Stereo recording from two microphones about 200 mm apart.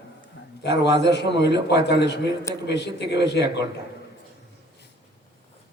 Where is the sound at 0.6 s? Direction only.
60° left (ahead or behind).